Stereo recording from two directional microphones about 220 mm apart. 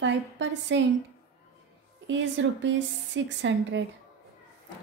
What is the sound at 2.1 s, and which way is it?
A woman's voice, 55° right (ahead or behind).